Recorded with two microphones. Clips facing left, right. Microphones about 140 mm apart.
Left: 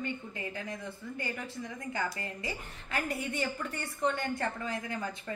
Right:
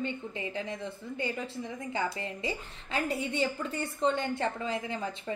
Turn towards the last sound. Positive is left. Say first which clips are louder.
# right 3 dB
turn(degrees=-25)  # may be behind; listen again after turning